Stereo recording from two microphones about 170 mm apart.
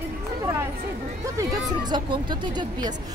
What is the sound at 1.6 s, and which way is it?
Speech, 25° right (ahead or behind).